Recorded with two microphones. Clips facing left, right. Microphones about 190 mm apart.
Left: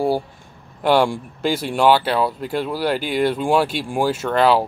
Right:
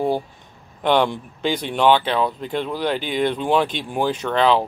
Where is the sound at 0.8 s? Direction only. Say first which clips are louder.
Left 2 dB; 10° left (ahead or behind).